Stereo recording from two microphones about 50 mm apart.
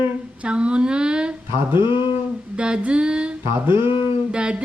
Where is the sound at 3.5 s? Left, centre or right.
Right.